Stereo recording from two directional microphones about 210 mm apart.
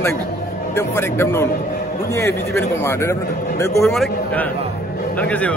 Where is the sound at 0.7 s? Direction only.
10° left (ahead or behind).